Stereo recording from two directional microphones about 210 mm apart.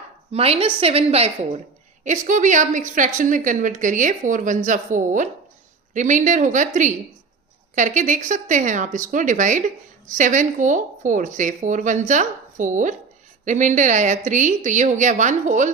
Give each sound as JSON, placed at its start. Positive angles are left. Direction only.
{"t": 0.3, "sound": "a woman's voice", "side_deg": -30}
{"t": 7.8, "sound": "a woman's voice", "side_deg": -35}